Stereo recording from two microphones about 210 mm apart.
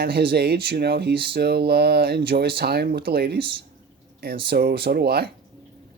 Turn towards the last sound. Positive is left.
turn(degrees=-50)  # may be behind; listen again after turning